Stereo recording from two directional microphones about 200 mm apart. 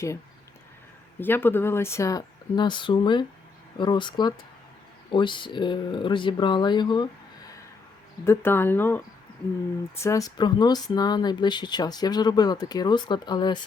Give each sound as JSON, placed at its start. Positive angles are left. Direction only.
{"t": 1.2, "sound": "speech", "side_deg": 10}
{"t": 8.2, "sound": "speech", "side_deg": 10}